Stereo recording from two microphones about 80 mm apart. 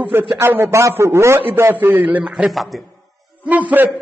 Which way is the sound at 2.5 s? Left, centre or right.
Centre.